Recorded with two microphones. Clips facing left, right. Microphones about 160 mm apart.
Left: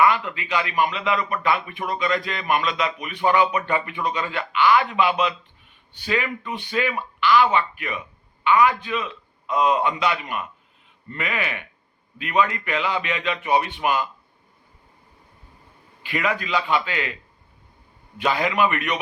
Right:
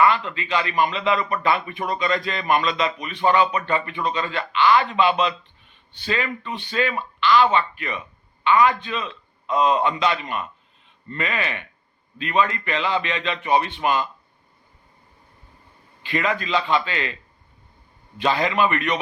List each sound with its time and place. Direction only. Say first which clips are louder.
0.0 s a man's voice: even; 10° left (ahead or behind)
0.9 s speech: right 2 dB; 30° right (ahead or behind)
3.0 s speech: even; 10° left (ahead or behind)
16.0 s speech: right 1 dB; 10° left (ahead or behind)
18.2 s speech: right 1 dB; 10° left (ahead or behind)